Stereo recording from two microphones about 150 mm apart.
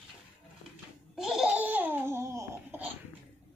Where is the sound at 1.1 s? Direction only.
5° right (ahead or behind).